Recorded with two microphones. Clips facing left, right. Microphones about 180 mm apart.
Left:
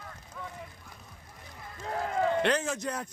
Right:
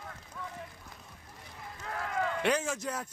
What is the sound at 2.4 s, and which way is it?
Speech, 10° right (ahead or behind).